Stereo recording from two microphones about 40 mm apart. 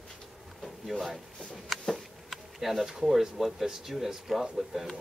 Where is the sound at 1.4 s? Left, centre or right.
Centre.